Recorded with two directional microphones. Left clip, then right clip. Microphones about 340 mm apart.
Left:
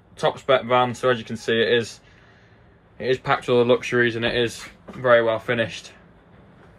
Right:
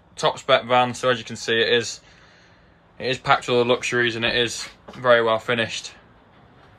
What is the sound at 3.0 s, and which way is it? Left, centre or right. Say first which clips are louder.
Speech: right 2 dB; centre.